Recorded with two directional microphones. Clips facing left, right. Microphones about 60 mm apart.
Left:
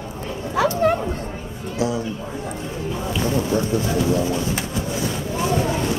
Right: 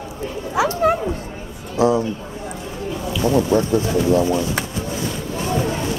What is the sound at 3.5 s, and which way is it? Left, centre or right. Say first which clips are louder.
Speech: right 3 dB; right.